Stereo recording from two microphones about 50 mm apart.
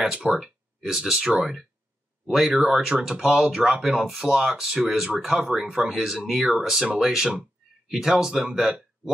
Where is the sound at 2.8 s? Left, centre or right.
Centre.